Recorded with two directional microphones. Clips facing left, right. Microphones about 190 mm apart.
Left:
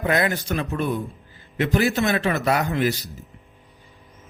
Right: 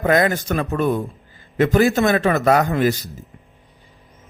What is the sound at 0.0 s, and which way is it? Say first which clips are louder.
A man's voice: right 5 dB; 45° right (ahead or behind).